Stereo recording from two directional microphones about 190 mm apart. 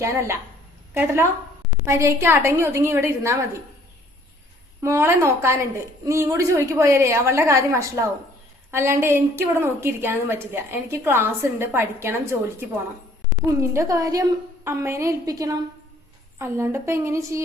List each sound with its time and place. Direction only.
0.9 s a woman's voice: 15° right (ahead or behind)
4.8 s a woman's voice: 15° right (ahead or behind)